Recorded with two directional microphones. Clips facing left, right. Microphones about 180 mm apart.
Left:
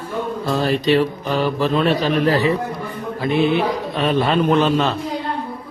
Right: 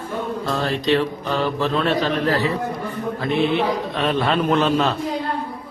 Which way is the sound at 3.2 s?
5° left (ahead or behind).